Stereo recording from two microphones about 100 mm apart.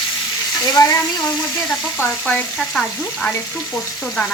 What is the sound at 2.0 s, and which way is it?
Frying, 15° left (ahead or behind).